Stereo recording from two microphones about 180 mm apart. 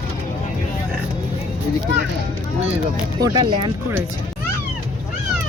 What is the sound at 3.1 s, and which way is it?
Speech, 20° right (ahead or behind).